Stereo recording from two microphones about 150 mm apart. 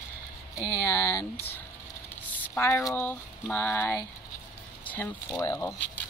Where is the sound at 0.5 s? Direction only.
20° left (ahead or behind).